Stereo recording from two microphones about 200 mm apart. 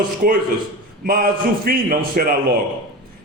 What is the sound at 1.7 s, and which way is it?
Speech, 50° right (ahead or behind).